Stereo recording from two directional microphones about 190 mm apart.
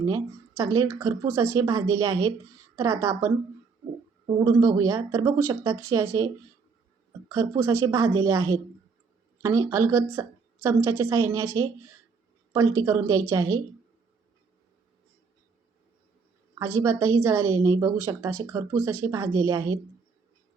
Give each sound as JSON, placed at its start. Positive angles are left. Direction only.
{"t": 0.0, "sound": "a woman's voice", "side_deg": -20}
{"t": 4.4, "sound": "a woman's voice", "side_deg": -15}
{"t": 16.6, "sound": "a woman's voice", "side_deg": -15}